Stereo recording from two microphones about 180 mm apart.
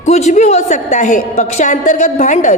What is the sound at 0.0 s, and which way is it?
A woman's voice, 40° left (ahead or behind).